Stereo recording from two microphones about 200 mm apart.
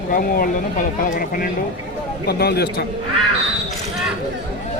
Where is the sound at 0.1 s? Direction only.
45° left (ahead or behind).